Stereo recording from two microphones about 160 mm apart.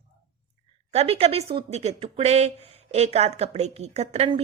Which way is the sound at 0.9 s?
40° right (ahead or behind).